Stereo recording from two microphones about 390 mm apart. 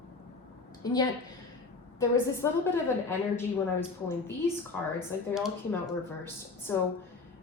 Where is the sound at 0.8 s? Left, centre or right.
Centre.